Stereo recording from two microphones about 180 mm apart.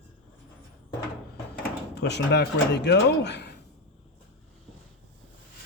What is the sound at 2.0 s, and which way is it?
Speech, 70° left (ahead or behind).